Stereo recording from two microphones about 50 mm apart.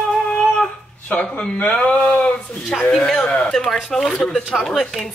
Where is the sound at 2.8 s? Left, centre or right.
Centre.